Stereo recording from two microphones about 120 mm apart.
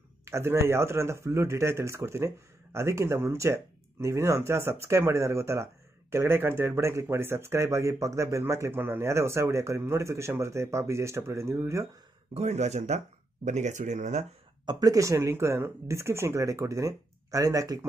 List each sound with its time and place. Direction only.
0.2 s speech: 20° right (ahead or behind)
12.4 s speech: 70° right (ahead or behind)
14.7 s speech: 30° right (ahead or behind)